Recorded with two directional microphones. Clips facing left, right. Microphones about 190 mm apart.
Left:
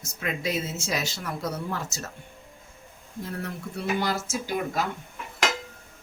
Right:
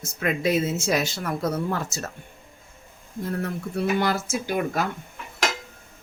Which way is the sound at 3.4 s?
55° right (ahead or behind).